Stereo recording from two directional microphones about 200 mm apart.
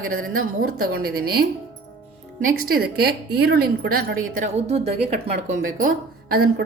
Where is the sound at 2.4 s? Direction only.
45° right (ahead or behind).